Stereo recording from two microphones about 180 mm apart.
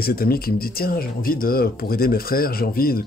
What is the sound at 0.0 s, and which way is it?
Speech, 55° left (ahead or behind).